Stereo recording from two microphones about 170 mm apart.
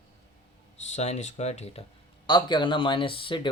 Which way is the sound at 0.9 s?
40° left (ahead or behind).